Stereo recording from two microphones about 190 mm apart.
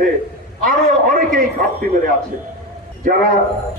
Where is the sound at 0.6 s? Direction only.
45° right (ahead or behind).